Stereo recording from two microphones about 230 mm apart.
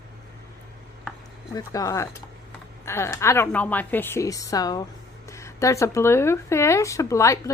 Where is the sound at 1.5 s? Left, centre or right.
Centre.